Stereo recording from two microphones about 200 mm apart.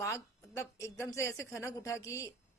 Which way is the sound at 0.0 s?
15° left (ahead or behind).